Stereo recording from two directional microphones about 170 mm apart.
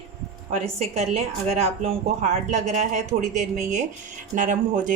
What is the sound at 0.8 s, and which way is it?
A woman's voice, 40° right (ahead or behind).